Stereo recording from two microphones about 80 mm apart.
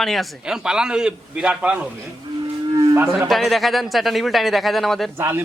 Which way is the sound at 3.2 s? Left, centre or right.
Centre.